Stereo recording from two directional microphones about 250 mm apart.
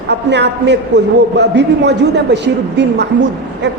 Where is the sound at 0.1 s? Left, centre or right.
Right.